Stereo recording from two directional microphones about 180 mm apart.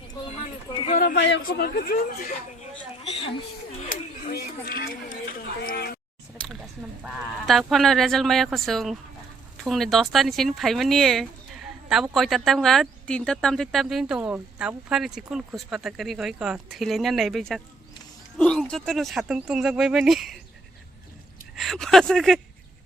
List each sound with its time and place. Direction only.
0.7 s a sound: 30° left (ahead or behind)
0.9 s speech: 55° left (ahead or behind)
1.2 s speech: 65° left (ahead or behind); by 2.3 s 50° left (ahead or behind)
3.8 s chatter: 55° left (ahead or behind)
7.0 s speech: centre (ahead or behind)
21.5 s speech: centre (ahead or behind)